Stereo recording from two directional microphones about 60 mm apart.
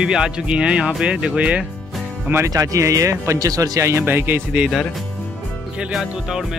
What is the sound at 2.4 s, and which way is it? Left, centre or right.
Speech, right.